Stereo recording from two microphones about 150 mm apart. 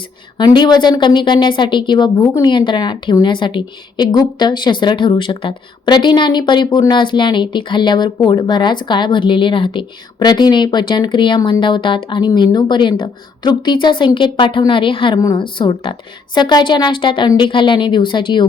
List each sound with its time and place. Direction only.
0.3 s a woman's voice: 30° left (ahead or behind)